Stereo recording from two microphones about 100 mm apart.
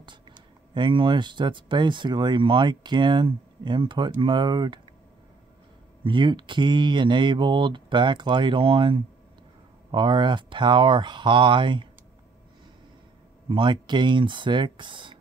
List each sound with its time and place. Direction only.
0.7 s speech: 50° right (ahead or behind)
6.0 s speech: 50° right (ahead or behind)
13.5 s speech: 55° right (ahead or behind)